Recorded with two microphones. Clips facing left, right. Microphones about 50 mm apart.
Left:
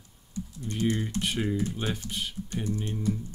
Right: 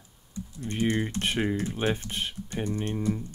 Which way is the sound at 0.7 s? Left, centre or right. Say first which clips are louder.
Right 2 dB; right.